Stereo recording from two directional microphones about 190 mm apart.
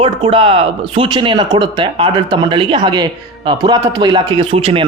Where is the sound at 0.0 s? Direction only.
30° right (ahead or behind).